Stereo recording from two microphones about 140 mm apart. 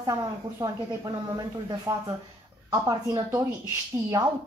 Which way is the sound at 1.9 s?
20° right (ahead or behind).